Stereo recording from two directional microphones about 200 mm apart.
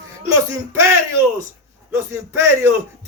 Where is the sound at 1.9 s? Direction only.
15° right (ahead or behind).